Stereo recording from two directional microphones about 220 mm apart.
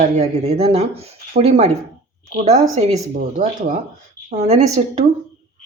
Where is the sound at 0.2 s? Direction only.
30° right (ahead or behind).